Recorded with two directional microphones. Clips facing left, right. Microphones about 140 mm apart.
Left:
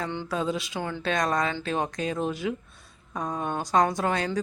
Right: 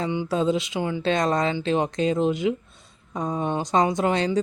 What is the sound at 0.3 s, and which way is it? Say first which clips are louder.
A woman's voice: right 6 dB; 25° right (ahead or behind).